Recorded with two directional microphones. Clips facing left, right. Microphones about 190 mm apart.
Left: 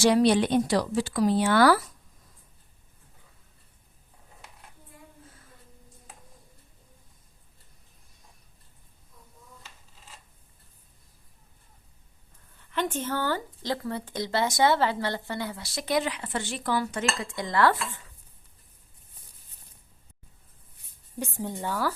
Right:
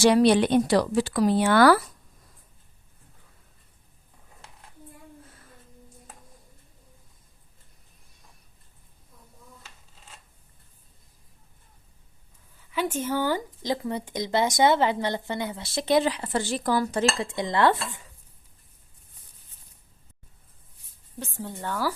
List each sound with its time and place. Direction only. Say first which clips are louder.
0.0 s speech: right 2 dB; 65° right (ahead or behind)
12.5 s speech: right 1 dB; 5° right (ahead or behind); by 18.0 s 20° right (ahead or behind)
21.2 s speech: left 3 dB; 15° left (ahead or behind)